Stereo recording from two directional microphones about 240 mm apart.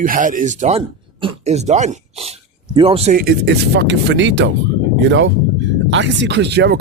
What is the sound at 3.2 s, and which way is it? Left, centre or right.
Speech, right.